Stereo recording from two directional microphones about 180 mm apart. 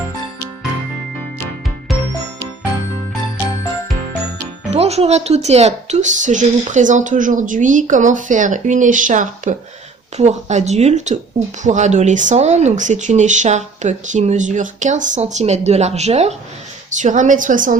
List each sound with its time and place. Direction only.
4.7 s a woman's voice: 35° right (ahead or behind)